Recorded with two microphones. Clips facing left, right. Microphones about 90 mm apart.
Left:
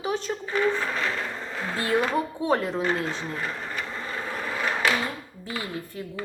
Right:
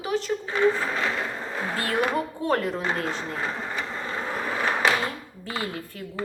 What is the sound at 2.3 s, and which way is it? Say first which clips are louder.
Speech: even; 20° left (ahead or behind).